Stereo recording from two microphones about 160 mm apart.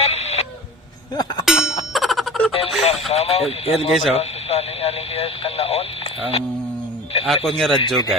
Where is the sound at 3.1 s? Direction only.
40° left (ahead or behind).